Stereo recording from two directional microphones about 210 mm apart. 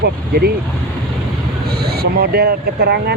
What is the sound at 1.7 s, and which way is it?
Speech, 50° right (ahead or behind).